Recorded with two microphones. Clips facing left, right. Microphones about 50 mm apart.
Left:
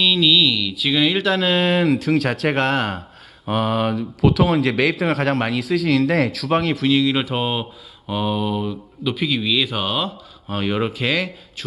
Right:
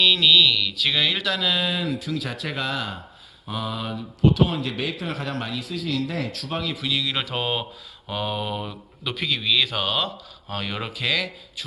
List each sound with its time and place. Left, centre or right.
0.0 s speech: centre
1.1 s speech: left
1.9 s speech: left
6.8 s speech: left
7.1 s speech: centre